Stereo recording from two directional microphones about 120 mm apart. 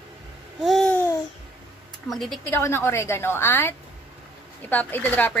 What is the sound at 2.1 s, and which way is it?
Speech, centre (ahead or behind).